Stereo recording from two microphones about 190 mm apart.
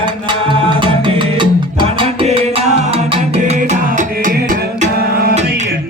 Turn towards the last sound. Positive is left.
turn(degrees=-50)  # may be behind; listen again after turning